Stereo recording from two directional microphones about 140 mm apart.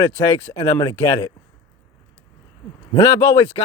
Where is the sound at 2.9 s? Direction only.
20° left (ahead or behind).